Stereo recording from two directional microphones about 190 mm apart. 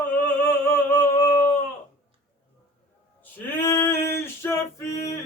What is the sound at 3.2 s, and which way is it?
Male singing, 15° left (ahead or behind).